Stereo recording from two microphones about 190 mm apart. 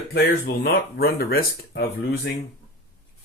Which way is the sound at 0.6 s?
55° left (ahead or behind).